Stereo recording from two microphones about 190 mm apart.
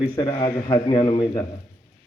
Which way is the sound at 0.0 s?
25° left (ahead or behind).